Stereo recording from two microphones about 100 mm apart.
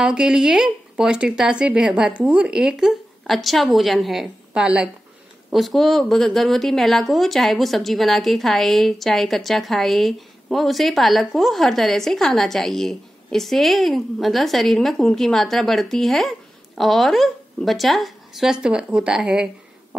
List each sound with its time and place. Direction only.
0.0 s speech: 5° right (ahead or behind)